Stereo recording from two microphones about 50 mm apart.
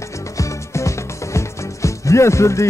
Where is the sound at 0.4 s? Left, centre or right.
Left.